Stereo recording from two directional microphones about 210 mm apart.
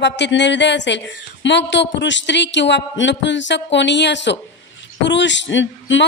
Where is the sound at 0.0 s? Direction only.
55° left (ahead or behind).